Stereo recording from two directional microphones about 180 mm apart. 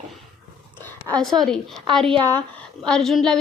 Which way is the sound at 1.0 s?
5° left (ahead or behind).